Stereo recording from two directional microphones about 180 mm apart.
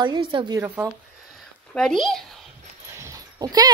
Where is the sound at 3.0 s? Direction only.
20° right (ahead or behind).